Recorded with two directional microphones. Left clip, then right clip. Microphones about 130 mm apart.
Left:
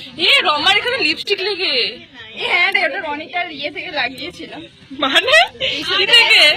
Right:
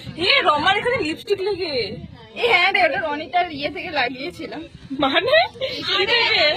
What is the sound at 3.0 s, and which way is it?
Speech, 85° right.